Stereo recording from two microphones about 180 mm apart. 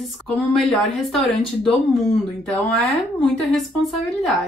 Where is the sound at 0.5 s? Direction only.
Centre (ahead or behind).